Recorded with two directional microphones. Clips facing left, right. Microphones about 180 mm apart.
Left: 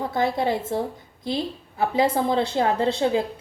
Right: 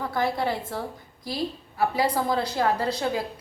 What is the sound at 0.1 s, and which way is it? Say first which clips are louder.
A woman's voice: left 3 dB; 20° left (ahead or behind).